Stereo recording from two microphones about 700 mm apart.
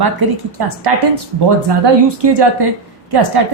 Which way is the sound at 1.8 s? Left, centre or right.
Right.